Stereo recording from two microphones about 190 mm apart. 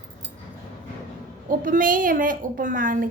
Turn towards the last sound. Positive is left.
turn(degrees=-45)  # may be behind; listen again after turning